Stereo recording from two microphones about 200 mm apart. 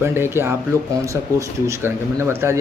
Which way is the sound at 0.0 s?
10° right (ahead or behind).